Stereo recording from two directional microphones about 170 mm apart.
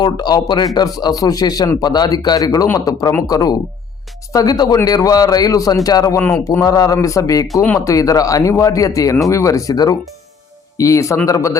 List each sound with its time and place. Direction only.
0.0 s speech: 25° left (ahead or behind)
7.4 s speech: centre (ahead or behind)
7.7 s speech: 20° left (ahead or behind)